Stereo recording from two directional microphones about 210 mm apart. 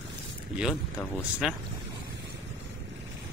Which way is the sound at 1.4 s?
5° right (ahead or behind).